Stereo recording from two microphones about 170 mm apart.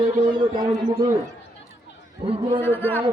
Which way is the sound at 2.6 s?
10° left (ahead or behind).